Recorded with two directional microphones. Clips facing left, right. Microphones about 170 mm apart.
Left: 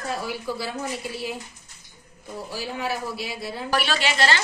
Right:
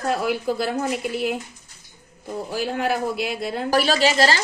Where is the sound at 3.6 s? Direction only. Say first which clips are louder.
Right 6 dB; 40° right (ahead or behind).